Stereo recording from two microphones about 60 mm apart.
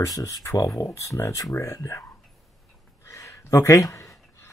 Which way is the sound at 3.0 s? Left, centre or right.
Left.